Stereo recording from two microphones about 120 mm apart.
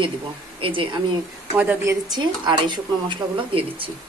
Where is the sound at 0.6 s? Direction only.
45° right (ahead or behind).